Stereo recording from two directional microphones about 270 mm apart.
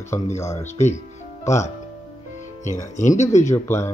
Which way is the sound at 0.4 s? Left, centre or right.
Centre.